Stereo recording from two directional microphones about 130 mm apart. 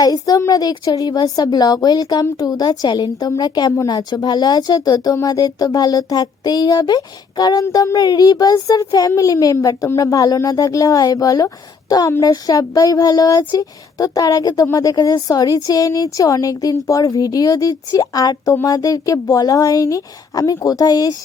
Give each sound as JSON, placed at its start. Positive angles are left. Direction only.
{"t": 0.0, "sound": "speech", "side_deg": 30}